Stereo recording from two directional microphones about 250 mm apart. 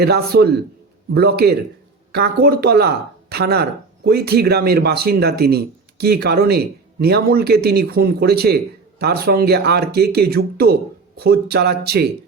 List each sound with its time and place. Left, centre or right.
0.0 s speech: right